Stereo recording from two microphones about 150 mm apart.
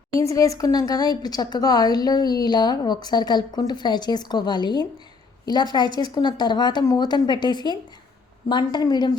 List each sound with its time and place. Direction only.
0.2 s speech: 20° left (ahead or behind)